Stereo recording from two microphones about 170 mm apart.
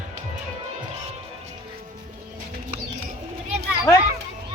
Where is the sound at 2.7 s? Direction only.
45° right (ahead or behind).